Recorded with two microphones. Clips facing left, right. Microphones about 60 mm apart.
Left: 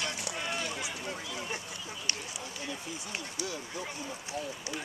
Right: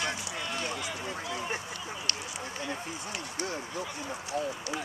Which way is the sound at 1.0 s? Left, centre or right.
Right.